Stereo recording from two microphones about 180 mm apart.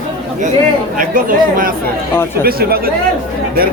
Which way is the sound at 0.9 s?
50° right (ahead or behind).